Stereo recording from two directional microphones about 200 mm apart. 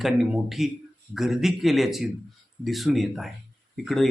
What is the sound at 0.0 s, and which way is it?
Speech, centre (ahead or behind).